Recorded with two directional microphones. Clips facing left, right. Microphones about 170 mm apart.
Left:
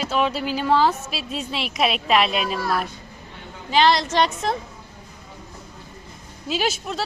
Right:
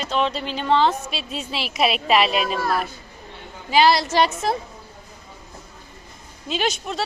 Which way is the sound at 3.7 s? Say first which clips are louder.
Right 1 dB; 10° right (ahead or behind).